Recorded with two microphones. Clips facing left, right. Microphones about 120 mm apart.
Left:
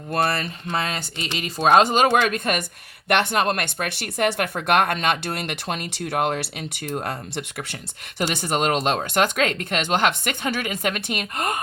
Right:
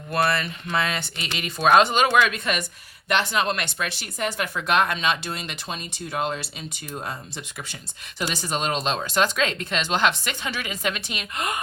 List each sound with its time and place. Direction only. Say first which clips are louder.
0.1 s speech: even; 40° left (ahead or behind)
3.1 s speech: left 3 dB; 55° left (ahead or behind)